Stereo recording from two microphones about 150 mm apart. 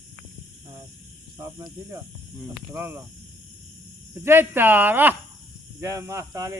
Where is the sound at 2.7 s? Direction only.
15° right (ahead or behind).